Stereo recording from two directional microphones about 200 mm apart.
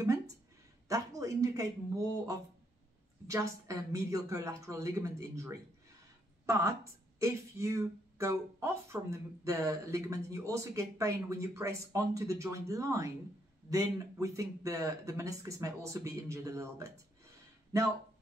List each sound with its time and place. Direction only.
0.8 s speech: 15° right (ahead or behind)
14.2 s speech: 15° right (ahead or behind)